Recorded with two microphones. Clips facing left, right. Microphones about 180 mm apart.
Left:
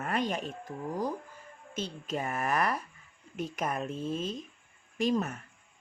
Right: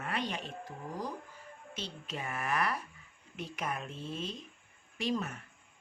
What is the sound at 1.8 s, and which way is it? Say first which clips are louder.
Speech: left 7 dB; 45° left (ahead or behind).